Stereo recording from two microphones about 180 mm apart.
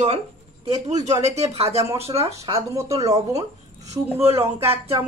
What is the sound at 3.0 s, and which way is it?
Speech, 35° right (ahead or behind).